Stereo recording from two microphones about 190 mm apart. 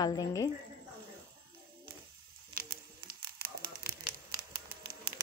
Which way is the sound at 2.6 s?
55° right (ahead or behind).